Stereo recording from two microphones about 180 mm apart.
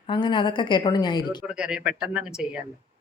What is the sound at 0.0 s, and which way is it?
A woman's voice, 25° left (ahead or behind).